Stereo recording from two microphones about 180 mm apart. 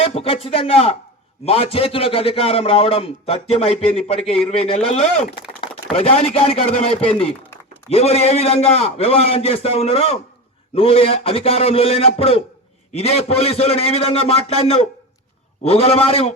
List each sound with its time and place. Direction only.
0.0 s a man's voice: 30° left (ahead or behind)